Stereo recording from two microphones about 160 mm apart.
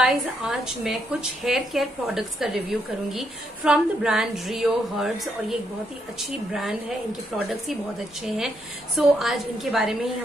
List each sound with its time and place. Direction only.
0.0 s a woman's voice: 5° right (ahead or behind)